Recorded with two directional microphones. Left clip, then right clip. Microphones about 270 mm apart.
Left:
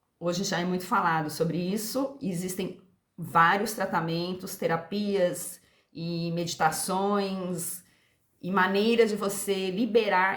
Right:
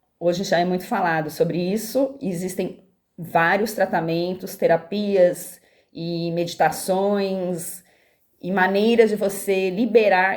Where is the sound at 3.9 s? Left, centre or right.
Left.